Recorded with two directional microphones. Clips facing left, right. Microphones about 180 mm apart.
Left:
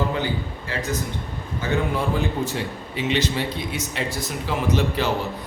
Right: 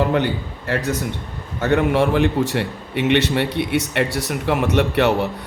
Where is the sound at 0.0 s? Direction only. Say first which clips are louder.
Right 6 dB; 65° right (ahead or behind).